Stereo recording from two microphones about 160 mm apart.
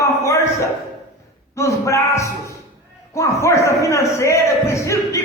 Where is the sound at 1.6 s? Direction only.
20° left (ahead or behind).